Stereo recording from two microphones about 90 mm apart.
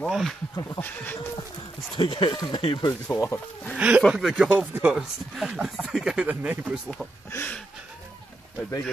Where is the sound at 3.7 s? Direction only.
15° right (ahead or behind).